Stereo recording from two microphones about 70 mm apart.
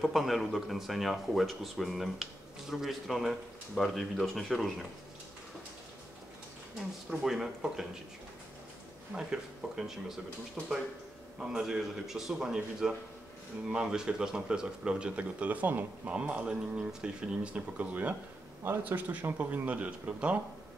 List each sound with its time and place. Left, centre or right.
0.0 s speech: centre
7.1 s speech: centre
9.1 s speech: centre